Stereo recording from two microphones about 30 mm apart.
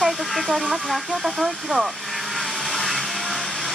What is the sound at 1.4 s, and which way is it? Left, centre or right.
Vehicle, centre.